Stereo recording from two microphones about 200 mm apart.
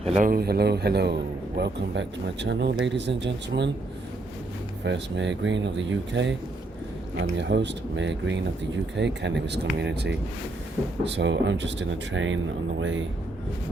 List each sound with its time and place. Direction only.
0.0 s a man's voice: 35° right (ahead or behind)
0.3 s speech: 50° right (ahead or behind)
4.8 s speech: 60° right (ahead or behind)